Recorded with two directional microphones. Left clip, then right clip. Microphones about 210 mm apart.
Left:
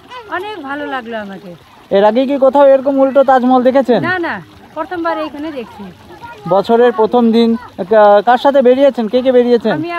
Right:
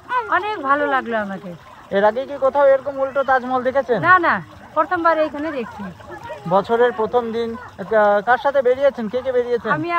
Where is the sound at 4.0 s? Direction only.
5° right (ahead or behind).